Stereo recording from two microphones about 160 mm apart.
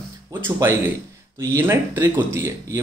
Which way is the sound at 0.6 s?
15° right (ahead or behind).